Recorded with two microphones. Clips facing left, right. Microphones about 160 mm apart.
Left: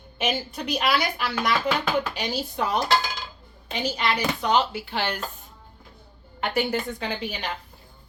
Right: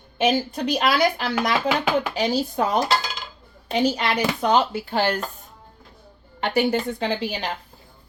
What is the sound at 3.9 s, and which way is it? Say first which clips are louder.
Speech: right 2 dB; 45° right (ahead or behind).